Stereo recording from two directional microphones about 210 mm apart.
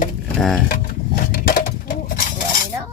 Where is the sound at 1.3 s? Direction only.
40° left (ahead or behind).